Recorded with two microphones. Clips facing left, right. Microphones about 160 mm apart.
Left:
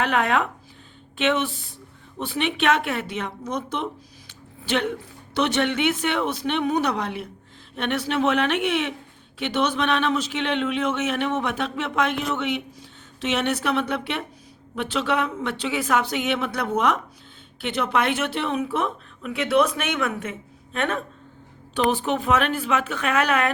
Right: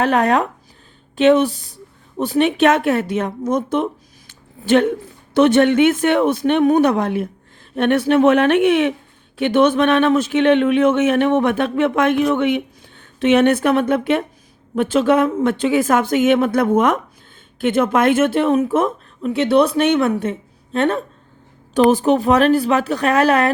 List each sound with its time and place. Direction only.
0.0 s a woman's voice: 40° right (ahead or behind)
19.3 s speech: 30° right (ahead or behind)